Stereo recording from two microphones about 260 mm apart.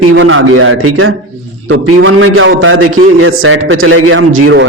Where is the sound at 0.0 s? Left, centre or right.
Right.